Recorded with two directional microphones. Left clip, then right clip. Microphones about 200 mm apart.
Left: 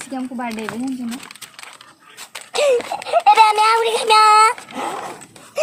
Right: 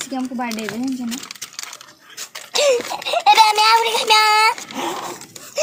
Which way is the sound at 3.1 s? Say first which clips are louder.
Left 1 dB; 5° left (ahead or behind).